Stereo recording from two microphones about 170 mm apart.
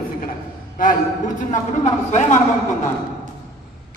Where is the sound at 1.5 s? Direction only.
45° left (ahead or behind).